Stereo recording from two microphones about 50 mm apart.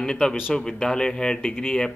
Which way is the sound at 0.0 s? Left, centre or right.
Centre.